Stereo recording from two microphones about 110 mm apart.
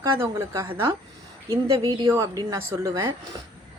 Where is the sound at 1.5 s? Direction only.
30° right (ahead or behind).